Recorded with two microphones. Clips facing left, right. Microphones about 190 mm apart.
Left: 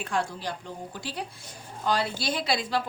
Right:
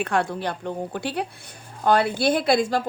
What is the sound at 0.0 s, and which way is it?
A woman's voice, 65° right (ahead or behind).